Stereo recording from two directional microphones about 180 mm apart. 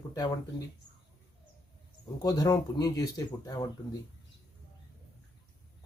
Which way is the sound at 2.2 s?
20° left (ahead or behind).